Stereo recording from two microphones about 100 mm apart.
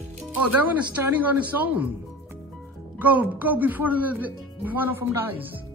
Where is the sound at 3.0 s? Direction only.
15° right (ahead or behind).